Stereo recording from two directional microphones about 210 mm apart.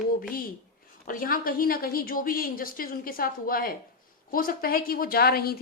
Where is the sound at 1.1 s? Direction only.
40° left (ahead or behind).